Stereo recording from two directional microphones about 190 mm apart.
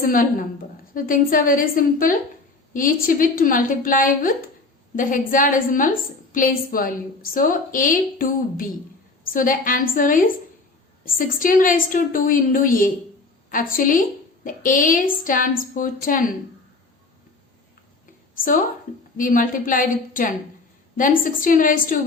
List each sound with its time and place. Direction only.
0.0 s a woman's voice: 45° left (ahead or behind)
19.1 s a woman's voice: 45° left (ahead or behind)